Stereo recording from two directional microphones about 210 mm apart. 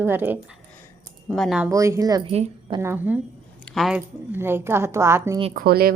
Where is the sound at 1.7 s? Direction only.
15° right (ahead or behind).